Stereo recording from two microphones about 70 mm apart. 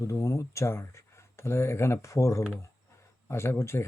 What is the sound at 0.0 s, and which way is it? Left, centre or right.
Speech, left.